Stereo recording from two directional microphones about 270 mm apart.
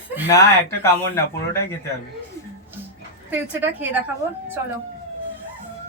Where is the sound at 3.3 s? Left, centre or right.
Centre.